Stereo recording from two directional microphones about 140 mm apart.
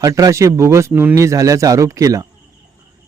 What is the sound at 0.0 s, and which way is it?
Speech, 25° right (ahead or behind).